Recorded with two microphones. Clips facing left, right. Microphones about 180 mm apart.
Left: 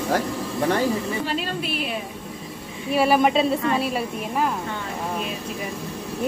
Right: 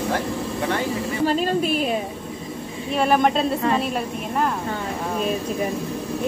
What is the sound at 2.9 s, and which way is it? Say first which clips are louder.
A woman's voice: left 1 dB; 5° left (ahead or behind).